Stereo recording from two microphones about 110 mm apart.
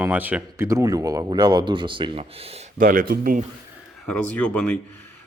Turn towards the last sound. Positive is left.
turn(degrees=10)  # may be behind; listen again after turning